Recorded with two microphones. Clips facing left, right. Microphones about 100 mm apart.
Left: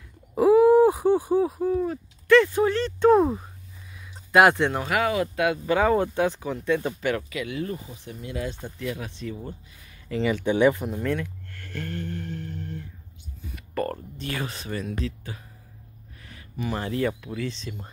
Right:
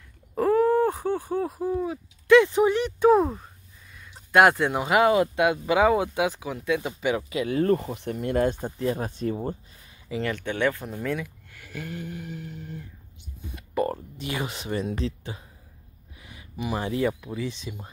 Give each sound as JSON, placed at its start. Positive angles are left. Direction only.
{"t": 0.3, "sound": "groan", "side_deg": 10}
{"t": 1.6, "sound": "speech", "side_deg": -5}
{"t": 2.2, "sound": "speech", "side_deg": -15}
{"t": 3.2, "sound": "speech", "side_deg": 0}
{"t": 3.9, "sound": "a sound", "side_deg": 0}
{"t": 4.8, "sound": "speech", "side_deg": -25}
{"t": 5.8, "sound": "speech", "side_deg": -10}
{"t": 7.3, "sound": "speech", "side_deg": -35}
{"t": 7.6, "sound": "speech", "side_deg": -60}
{"t": 10.2, "sound": "speech", "side_deg": 10}
{"t": 11.0, "sound": "speech", "side_deg": -5}
{"t": 13.5, "sound": "speech", "side_deg": -15}
{"t": 16.2, "sound": "a sound", "side_deg": -15}
{"t": 17.2, "sound": "speech", "side_deg": -15}